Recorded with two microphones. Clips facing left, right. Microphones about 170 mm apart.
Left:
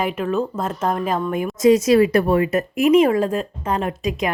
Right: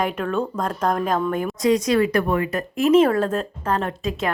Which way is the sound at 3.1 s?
10° left (ahead or behind).